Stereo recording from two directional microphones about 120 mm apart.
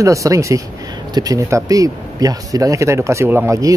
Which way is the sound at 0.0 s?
25° right (ahead or behind).